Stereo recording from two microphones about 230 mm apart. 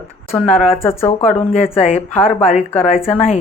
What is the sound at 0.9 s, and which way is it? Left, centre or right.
Speech, centre.